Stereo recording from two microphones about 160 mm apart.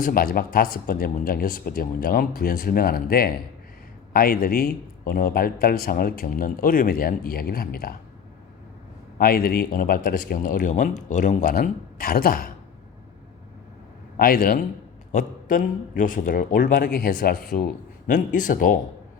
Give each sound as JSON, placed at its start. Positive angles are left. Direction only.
{"t": 0.0, "sound": "speech", "side_deg": 65}
{"t": 9.1, "sound": "speech", "side_deg": 70}
{"t": 11.4, "sound": "speech", "side_deg": 65}
{"t": 14.2, "sound": "speech", "side_deg": 65}
{"t": 15.1, "sound": "speech", "side_deg": 55}
{"t": 18.1, "sound": "speech", "side_deg": 55}